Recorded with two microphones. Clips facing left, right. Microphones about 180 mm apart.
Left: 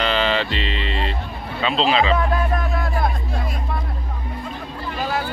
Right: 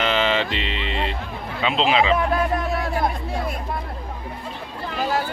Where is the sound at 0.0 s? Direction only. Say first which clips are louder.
Even; 15° right (ahead or behind).